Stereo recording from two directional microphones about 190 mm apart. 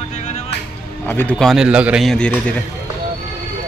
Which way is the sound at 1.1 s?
10° left (ahead or behind).